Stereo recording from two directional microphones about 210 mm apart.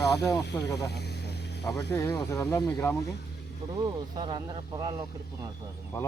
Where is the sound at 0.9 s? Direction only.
50° left (ahead or behind).